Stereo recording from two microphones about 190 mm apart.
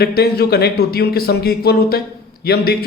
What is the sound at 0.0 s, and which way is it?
A man's voice, 55° left (ahead or behind).